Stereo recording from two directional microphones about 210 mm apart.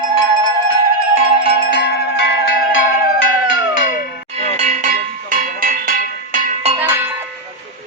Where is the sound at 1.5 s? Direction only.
55° left (ahead or behind).